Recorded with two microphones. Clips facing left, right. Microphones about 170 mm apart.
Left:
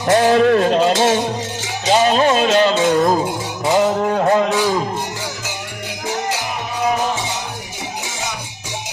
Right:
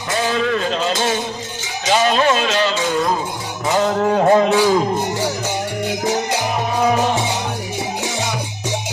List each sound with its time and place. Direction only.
0.1 s music: 60° left (ahead or behind)
1.9 s music: 35° left (ahead or behind)
3.8 s a sound: 5° left (ahead or behind)